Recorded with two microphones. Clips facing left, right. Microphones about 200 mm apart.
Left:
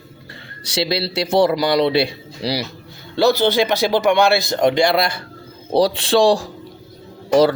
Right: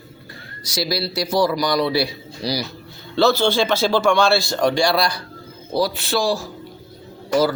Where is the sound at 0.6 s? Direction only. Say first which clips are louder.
Left 3 dB; 25° left (ahead or behind).